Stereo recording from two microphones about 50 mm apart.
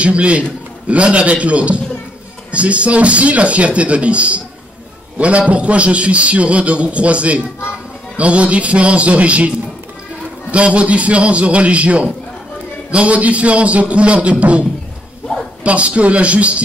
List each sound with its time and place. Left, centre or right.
0.0 s a man's voice: right
10.5 s a man's voice: right
15.2 s a sound: centre
15.6 s a man's voice: right